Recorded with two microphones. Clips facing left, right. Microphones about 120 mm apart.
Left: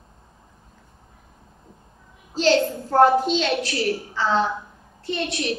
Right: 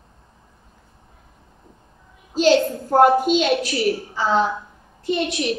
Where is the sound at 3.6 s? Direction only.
25° right (ahead or behind).